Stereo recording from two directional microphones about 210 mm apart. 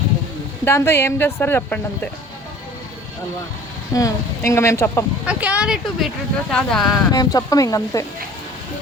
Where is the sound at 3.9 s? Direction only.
15° left (ahead or behind).